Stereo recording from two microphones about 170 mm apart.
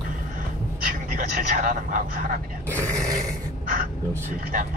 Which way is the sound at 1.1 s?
55° right (ahead or behind).